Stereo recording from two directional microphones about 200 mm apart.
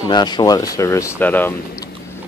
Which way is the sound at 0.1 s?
20° left (ahead or behind).